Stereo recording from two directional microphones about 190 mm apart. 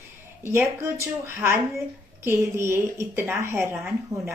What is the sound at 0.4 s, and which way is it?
A woman's voice, 15° right (ahead or behind).